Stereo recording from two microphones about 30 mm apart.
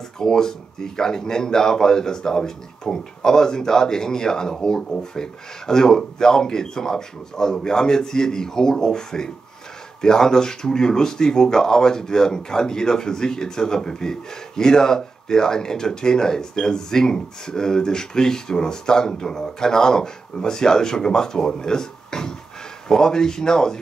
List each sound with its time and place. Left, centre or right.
0.2 s speech: centre